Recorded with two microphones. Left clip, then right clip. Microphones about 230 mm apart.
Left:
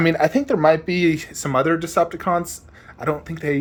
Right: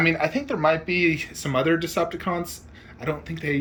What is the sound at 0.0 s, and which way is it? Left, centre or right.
Speech, left.